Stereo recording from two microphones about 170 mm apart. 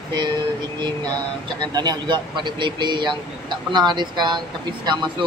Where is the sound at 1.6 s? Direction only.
25° right (ahead or behind).